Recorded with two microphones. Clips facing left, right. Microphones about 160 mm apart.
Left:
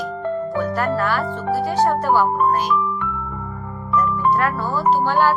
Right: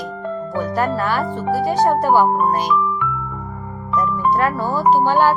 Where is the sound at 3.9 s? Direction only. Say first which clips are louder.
Right 1 dB; 15° right (ahead or behind).